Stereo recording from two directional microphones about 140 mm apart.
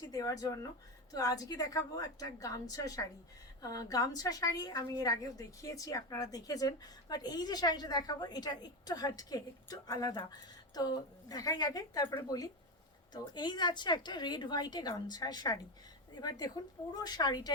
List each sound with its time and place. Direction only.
0.1 s a woman's voice: 25° left (ahead or behind)
16.9 s a woman's voice: 30° left (ahead or behind)